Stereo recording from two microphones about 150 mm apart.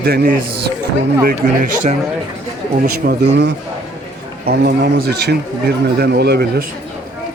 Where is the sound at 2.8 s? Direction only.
90° right.